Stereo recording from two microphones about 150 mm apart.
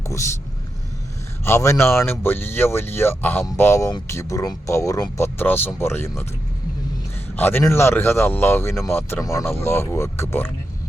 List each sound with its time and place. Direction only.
1.5 s speech: 20° left (ahead or behind)
7.3 s speech: 15° left (ahead or behind)